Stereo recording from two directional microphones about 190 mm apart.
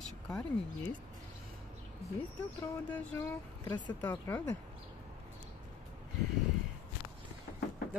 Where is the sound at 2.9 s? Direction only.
10° left (ahead or behind).